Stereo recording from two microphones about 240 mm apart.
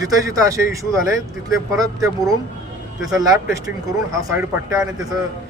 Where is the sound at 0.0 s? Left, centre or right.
Centre.